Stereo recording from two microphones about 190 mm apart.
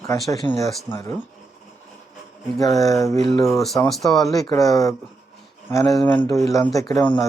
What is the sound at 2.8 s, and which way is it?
Speech, 15° left (ahead or behind).